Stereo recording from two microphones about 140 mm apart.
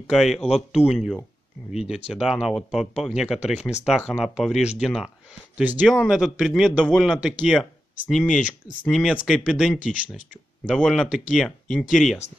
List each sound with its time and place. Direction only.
0.1 s a man's voice: centre (ahead or behind)
0.5 s a man's voice: 45° left (ahead or behind)
0.9 s a man's voice: 5° left (ahead or behind)
8.3 s speech: 65° left (ahead or behind)
8.8 s a man's voice: centre (ahead or behind)
10.8 s a man's voice: 5° left (ahead or behind)